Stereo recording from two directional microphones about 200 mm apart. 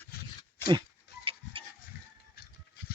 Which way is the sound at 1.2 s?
25° right (ahead or behind).